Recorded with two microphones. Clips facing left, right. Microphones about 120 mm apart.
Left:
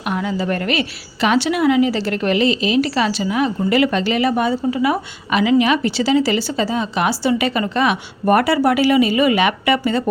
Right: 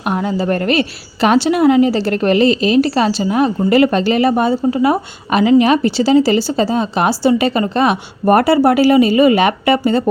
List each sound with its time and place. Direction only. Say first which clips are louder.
0.0 s a woman's voice: right 4 dB; 40° right (ahead or behind)